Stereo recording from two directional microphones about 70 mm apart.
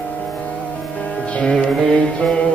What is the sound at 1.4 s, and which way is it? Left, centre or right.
Music, centre.